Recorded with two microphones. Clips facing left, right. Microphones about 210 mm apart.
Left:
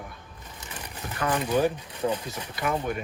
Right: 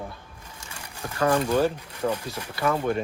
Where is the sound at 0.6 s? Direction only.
10° right (ahead or behind).